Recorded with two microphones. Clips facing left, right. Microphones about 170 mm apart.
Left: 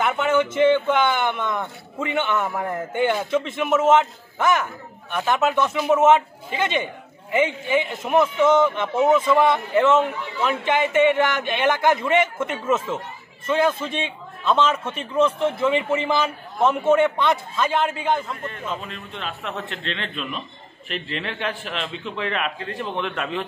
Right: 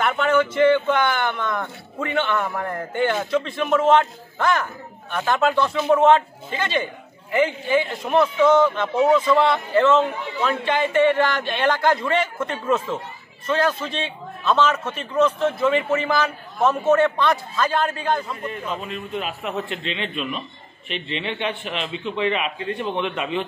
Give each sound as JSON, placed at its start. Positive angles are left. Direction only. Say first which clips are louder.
{"t": 0.0, "sound": "a man's voice", "louder": "right 1 dB", "side_deg": 20}
{"t": 8.9, "sound": "a man's voice", "louder": "even", "side_deg": 10}
{"t": 16.0, "sound": "speech", "louder": "even", "side_deg": 25}
{"t": 17.3, "sound": "a man's voice", "louder": "even", "side_deg": 20}
{"t": 18.4, "sound": "a man's voice", "louder": "right 2 dB", "side_deg": 0}